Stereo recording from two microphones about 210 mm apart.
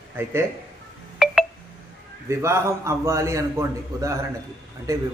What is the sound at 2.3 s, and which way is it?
A man's voice, 15° right (ahead or behind).